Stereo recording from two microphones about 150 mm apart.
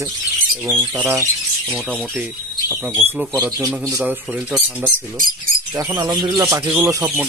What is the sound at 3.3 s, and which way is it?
Speech, 20° right (ahead or behind).